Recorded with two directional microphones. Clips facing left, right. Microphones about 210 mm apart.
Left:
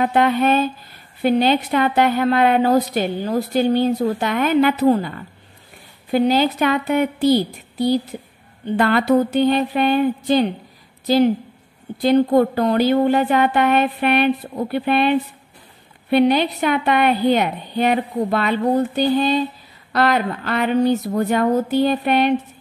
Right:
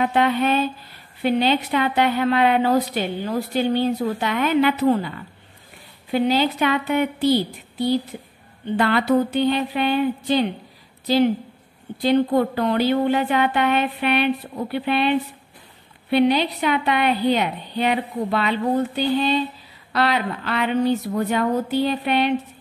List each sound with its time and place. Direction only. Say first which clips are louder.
0.0 s a woman's voice: left 3 dB; 45° left (ahead or behind)